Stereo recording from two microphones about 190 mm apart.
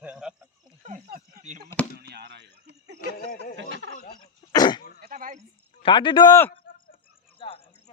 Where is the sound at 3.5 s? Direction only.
70° right (ahead or behind).